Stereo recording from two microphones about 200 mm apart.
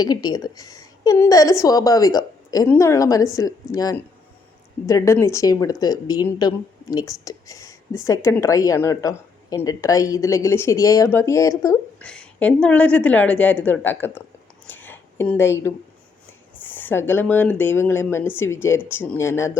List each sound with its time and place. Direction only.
0.0 s speech: 20° left (ahead or behind)
12.0 s speech: 5° left (ahead or behind)
14.7 s a sound: 10° left (ahead or behind)
16.6 s speech: 10° left (ahead or behind)